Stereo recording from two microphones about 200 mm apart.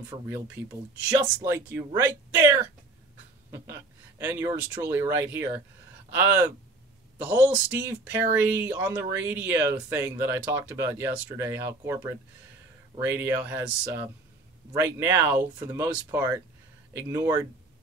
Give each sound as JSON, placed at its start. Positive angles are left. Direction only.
{"t": 0.1, "sound": "speech", "side_deg": -15}